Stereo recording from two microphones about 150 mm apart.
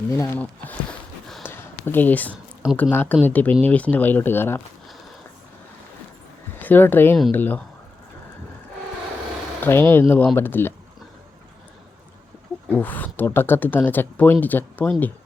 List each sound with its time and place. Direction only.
0.2 s speech: 10° left (ahead or behind)
1.5 s a sound: 15° left (ahead or behind)
2.9 s speech: 15° left (ahead or behind)
6.6 s speech: 10° left (ahead or behind)
9.6 s speech: 15° left (ahead or behind)
12.6 s speech: 10° left (ahead or behind)